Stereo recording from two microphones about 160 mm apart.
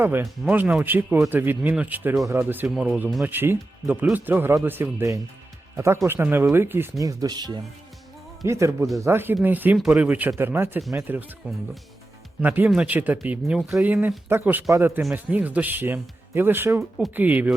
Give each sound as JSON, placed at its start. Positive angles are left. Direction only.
{"t": 0.0, "sound": "speech", "side_deg": -15}
{"t": 12.4, "sound": "speech", "side_deg": -10}